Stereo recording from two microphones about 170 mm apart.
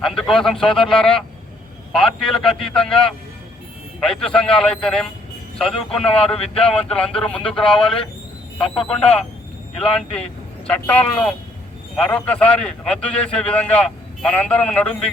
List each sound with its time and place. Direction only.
0.0 s speech: 5° left (ahead or behind)
8.8 s speech: 35° left (ahead or behind)
9.8 s a man's voice: 5° left (ahead or behind)